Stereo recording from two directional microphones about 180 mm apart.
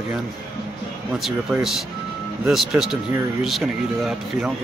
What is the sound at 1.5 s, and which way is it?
Speech, centre (ahead or behind).